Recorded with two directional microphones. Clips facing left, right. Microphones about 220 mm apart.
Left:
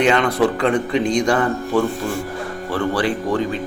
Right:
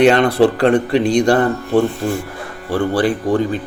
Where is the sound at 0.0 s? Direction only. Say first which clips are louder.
Right 5 dB; 60° right (ahead or behind).